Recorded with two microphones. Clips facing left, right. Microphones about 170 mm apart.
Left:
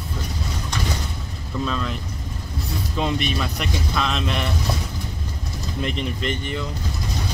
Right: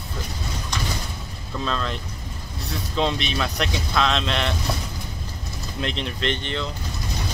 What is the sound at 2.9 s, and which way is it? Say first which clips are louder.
Speech: even; 10° left (ahead or behind).